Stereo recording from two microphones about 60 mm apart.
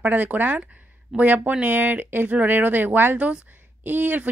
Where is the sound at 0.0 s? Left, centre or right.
Right.